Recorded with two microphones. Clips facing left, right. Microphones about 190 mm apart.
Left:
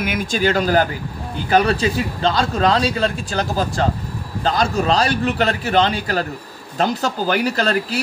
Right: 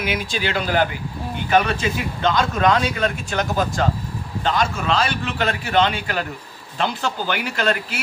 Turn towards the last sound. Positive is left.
turn(degrees=35)  # may be behind; listen again after turning